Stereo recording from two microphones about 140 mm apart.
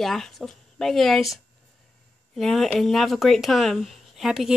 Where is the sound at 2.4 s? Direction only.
Centre (ahead or behind).